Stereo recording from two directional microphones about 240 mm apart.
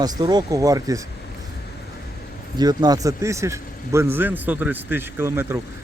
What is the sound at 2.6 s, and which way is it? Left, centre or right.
Speech, centre.